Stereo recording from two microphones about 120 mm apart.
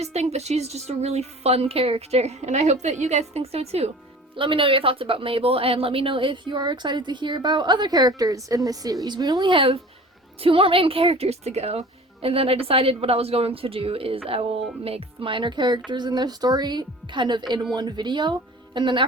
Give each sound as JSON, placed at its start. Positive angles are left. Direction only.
{"t": 0.0, "sound": "a woman's voice", "side_deg": -60}
{"t": 4.4, "sound": "a woman's voice", "side_deg": -45}